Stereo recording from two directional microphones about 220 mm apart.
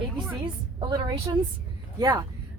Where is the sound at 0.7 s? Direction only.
20° right (ahead or behind).